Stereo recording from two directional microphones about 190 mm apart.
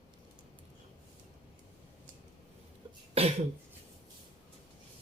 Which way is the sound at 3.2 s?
30° right (ahead or behind).